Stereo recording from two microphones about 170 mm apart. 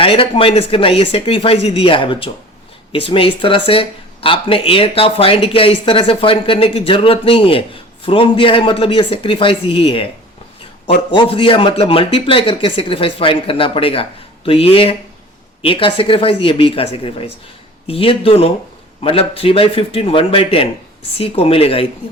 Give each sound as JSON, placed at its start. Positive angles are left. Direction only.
{"t": 0.0, "sound": "speech", "side_deg": 30}